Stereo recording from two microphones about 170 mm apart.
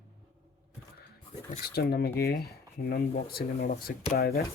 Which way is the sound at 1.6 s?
65° left (ahead or behind).